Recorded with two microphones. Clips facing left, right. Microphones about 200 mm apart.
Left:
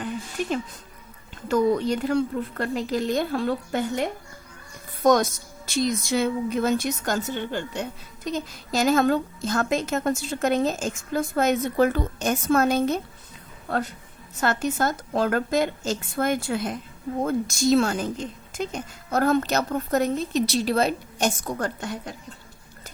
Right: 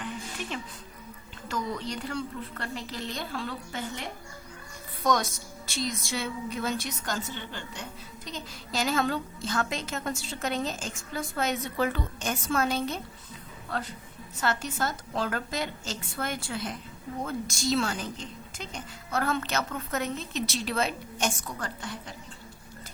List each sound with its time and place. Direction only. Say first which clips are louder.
0.4 s a woman's voice: left 9 dB; 45° left (ahead or behind)
14.4 s a woman's voice: left 6 dB; 55° left (ahead or behind)